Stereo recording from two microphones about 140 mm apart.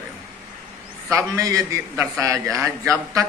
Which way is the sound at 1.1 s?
25° right (ahead or behind).